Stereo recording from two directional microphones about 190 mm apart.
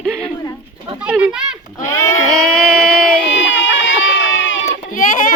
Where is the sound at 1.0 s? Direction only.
5° right (ahead or behind).